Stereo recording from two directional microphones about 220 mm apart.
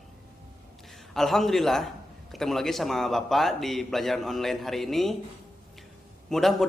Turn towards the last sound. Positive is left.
turn(degrees=0)  # may be behind; listen again after turning